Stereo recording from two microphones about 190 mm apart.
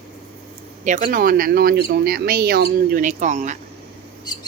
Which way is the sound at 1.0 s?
50° right (ahead or behind).